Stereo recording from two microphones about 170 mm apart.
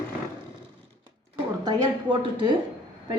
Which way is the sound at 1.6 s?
30° right (ahead or behind).